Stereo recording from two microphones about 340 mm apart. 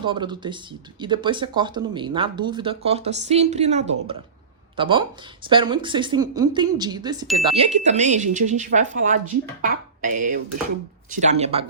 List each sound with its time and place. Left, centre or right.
0.0 s speech: centre